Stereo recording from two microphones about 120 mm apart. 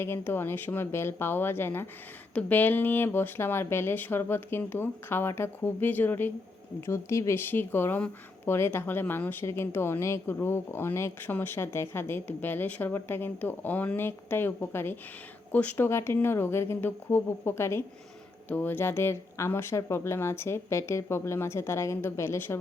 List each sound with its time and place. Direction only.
0.0 s speech: 20° left (ahead or behind)